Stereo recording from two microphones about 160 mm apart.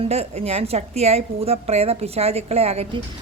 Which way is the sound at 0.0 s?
40° right (ahead or behind).